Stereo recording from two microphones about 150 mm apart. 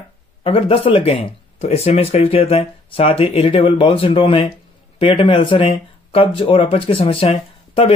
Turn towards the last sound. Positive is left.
turn(degrees=40)  # may be behind; listen again after turning